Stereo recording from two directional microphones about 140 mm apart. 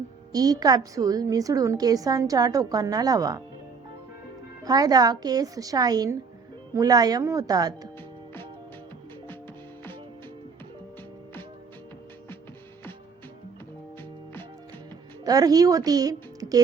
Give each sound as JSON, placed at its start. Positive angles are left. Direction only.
{"t": 0.3, "sound": "a woman's voice", "side_deg": -25}
{"t": 4.6, "sound": "a woman's voice", "side_deg": -25}
{"t": 15.2, "sound": "a woman's voice", "side_deg": -25}